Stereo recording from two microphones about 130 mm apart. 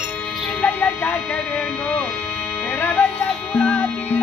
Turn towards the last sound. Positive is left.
turn(degrees=10)  # may be behind; listen again after turning